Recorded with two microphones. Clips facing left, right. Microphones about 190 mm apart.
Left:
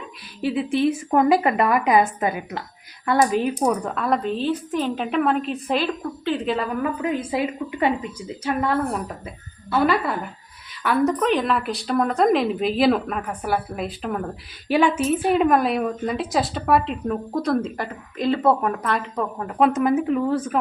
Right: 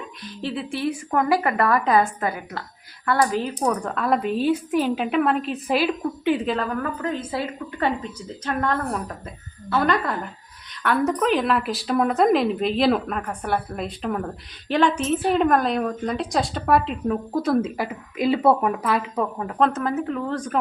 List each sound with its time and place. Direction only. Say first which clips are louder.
0.4 s a woman's voice: left 5 dB; 20° left (ahead or behind); by 19.5 s 5° right (ahead or behind)
19.5 s speech: left 4 dB; 10° left (ahead or behind)